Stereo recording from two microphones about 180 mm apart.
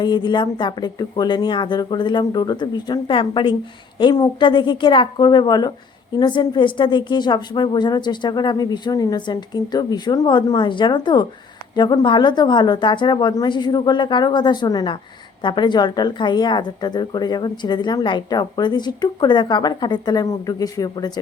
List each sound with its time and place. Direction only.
0.0 s speech: 25° left (ahead or behind)